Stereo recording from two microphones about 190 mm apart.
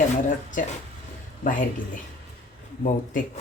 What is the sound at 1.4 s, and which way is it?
Speech, 45° left (ahead or behind).